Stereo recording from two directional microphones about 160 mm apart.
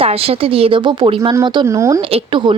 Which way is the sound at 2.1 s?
30° right (ahead or behind).